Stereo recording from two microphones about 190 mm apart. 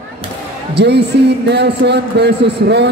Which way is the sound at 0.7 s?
60° right (ahead or behind).